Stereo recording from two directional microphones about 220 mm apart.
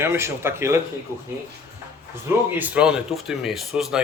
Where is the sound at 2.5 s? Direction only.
5° right (ahead or behind).